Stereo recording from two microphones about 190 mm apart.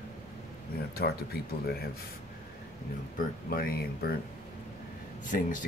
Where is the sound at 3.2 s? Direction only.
50° left (ahead or behind).